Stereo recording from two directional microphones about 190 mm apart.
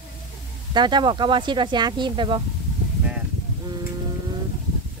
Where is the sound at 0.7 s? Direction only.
25° right (ahead or behind).